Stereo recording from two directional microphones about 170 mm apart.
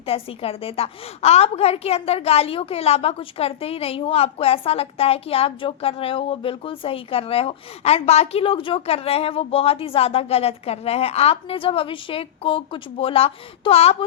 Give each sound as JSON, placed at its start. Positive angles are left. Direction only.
{"t": 0.0, "sound": "a woman's voice", "side_deg": 35}